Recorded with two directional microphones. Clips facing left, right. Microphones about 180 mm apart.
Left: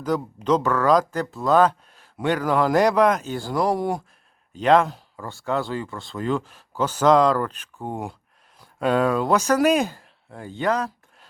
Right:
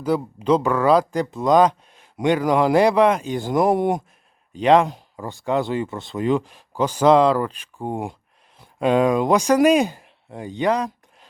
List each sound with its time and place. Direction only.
0.0 s speech: 10° right (ahead or behind)
4.6 s speech: 10° right (ahead or behind)